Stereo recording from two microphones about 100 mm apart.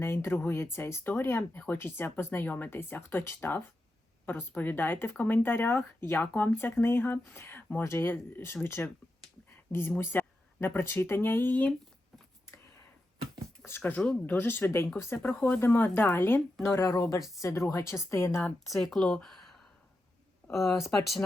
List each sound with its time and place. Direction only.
0.0 s speech: 25° left (ahead or behind)
1.5 s speech: 15° left (ahead or behind)
10.0 s speech: 20° left (ahead or behind)
13.7 s speech: 20° left (ahead or behind)
18.4 s speech: centre (ahead or behind)